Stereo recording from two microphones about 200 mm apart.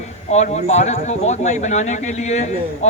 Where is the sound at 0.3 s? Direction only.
35° left (ahead or behind).